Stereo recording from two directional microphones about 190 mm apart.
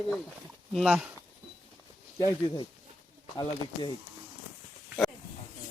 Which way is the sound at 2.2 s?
20° left (ahead or behind).